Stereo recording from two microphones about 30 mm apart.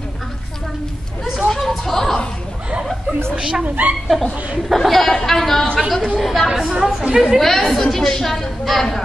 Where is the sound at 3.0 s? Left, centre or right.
Right.